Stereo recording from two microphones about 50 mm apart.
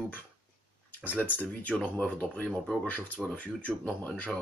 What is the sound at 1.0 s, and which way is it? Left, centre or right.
Speech, left.